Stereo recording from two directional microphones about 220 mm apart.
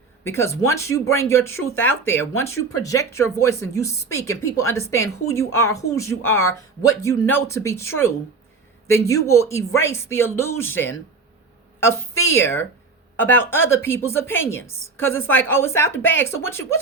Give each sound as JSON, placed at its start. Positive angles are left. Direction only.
{"t": 0.3, "sound": "speech", "side_deg": 10}
{"t": 1.4, "sound": "speech", "side_deg": 70}
{"t": 1.8, "sound": "speech", "side_deg": 10}
{"t": 8.9, "sound": "speech", "side_deg": 15}
{"t": 12.3, "sound": "speech", "side_deg": 10}